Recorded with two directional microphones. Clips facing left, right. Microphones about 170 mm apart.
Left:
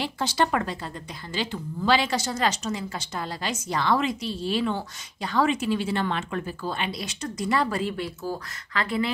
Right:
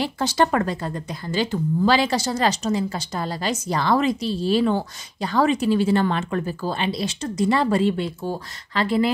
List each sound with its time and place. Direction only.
0.0 s speech: 45° right (ahead or behind)